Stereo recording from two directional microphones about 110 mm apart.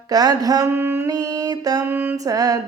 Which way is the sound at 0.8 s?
20° right (ahead or behind).